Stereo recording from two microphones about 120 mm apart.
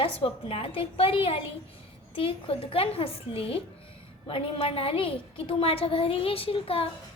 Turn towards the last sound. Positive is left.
turn(degrees=50)  # may be behind; listen again after turning